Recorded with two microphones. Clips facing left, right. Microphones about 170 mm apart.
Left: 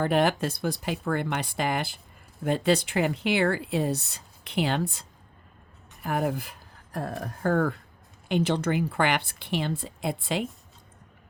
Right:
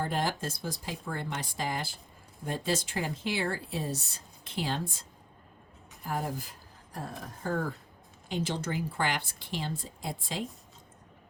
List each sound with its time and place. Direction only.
0.0 s speech: 65° left (ahead or behind)